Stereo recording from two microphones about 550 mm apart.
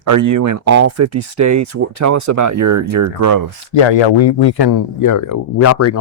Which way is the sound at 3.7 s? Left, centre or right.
Left.